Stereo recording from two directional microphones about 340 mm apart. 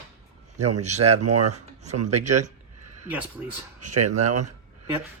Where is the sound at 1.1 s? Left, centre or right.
Right.